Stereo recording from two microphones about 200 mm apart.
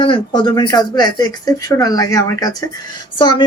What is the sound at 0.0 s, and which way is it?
Speech, 25° left (ahead or behind).